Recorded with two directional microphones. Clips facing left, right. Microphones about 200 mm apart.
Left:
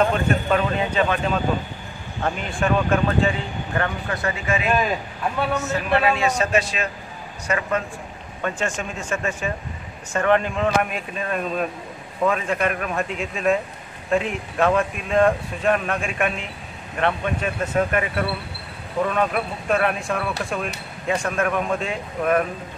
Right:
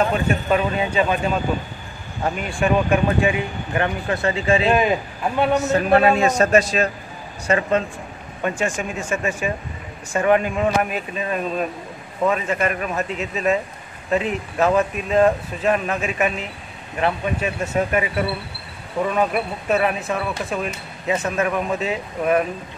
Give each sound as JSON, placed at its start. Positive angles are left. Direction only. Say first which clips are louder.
{"t": 0.1, "sound": "speech", "louder": "right 1 dB", "side_deg": -5}
{"t": 5.6, "sound": "a man's voice", "louder": "right 6 dB", "side_deg": -40}
{"t": 7.4, "sound": "speech", "louder": "right 5 dB", "side_deg": -30}
{"t": 8.4, "sound": "speech", "louder": "right 3 dB", "side_deg": -10}